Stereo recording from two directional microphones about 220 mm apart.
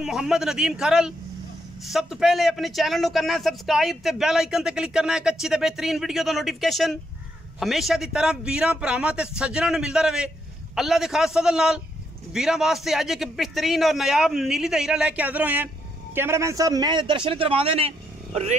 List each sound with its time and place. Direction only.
0.0 s a man's voice: centre (ahead or behind); by 18.6 s 30° right (ahead or behind)